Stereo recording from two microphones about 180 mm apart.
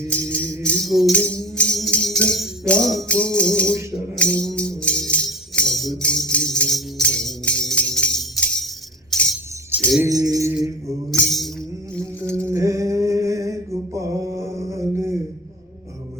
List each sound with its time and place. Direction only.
0.1 s music: 5° left (ahead or behind)
10.0 s mantra: 20° right (ahead or behind)
11.1 s music: centre (ahead or behind)
12.3 s mantra: 15° right (ahead or behind)